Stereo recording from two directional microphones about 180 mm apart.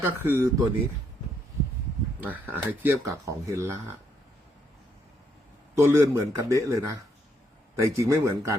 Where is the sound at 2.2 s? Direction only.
10° right (ahead or behind).